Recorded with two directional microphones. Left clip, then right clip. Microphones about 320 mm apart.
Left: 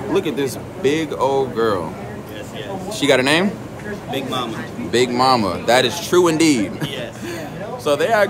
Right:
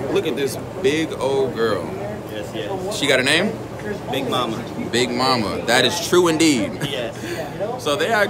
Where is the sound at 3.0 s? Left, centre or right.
Centre.